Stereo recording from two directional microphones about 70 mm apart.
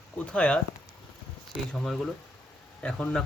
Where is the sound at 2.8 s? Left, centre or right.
Centre.